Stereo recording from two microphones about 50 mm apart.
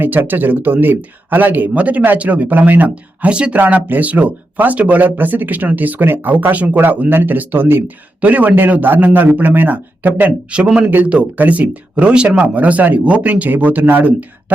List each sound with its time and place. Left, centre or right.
0.0 s speech: right
2.9 s speech: right
3.7 s speech: right
8.2 s speech: right